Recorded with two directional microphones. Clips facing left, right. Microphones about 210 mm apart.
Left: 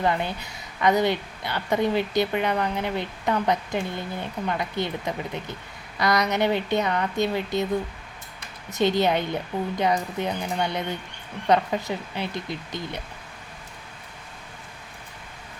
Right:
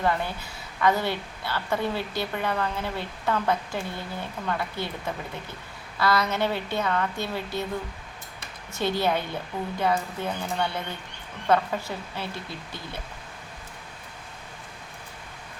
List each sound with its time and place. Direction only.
0.0 s a woman's voice: 20° left (ahead or behind)
8.7 s a woman's voice: 20° left (ahead or behind)